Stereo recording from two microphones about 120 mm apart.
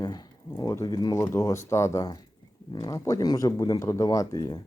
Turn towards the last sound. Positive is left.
turn(degrees=30)  # may be behind; listen again after turning